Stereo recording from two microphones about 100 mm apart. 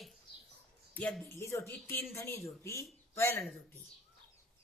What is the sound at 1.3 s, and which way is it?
Speech, 25° left (ahead or behind).